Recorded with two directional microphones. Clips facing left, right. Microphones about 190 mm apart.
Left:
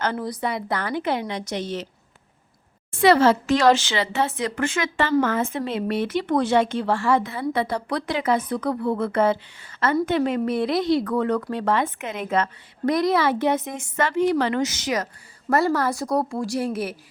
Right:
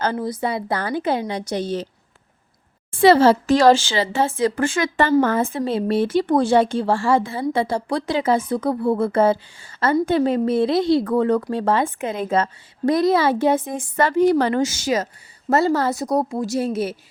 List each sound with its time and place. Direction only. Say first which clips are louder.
0.0 s a woman's voice: right 3 dB; 30° right (ahead or behind)
2.9 s a woman's voice: right 3 dB; 30° right (ahead or behind)